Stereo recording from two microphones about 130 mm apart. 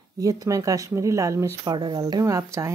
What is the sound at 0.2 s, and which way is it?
Speech, 25° right (ahead or behind).